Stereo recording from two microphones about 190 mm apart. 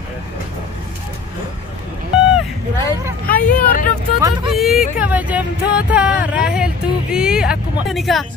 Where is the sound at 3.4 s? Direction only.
45° left (ahead or behind).